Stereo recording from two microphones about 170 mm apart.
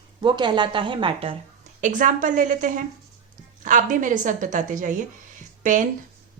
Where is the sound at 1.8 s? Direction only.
50° right (ahead or behind).